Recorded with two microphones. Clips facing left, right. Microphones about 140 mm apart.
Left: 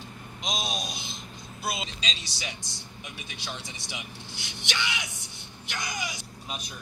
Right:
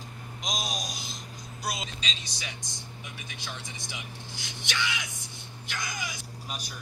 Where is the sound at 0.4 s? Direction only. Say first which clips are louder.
Left 2 dB; centre (ahead or behind).